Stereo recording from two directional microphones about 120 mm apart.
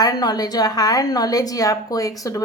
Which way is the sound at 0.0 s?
35° left (ahead or behind).